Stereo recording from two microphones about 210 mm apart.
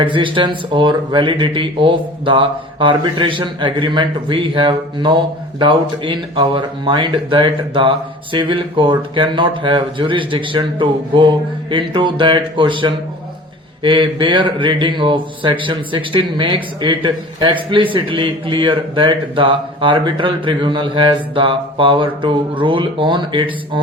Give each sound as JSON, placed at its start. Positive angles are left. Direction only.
{"t": 0.0, "sound": "speech", "side_deg": -25}